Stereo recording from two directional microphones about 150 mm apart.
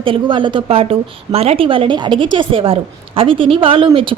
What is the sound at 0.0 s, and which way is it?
A woman's voice, 35° right (ahead or behind).